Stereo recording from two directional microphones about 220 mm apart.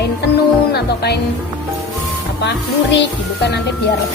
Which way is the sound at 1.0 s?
45° left (ahead or behind).